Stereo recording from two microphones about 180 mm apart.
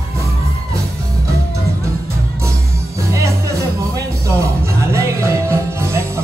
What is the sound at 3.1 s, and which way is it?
Music, 15° right (ahead or behind).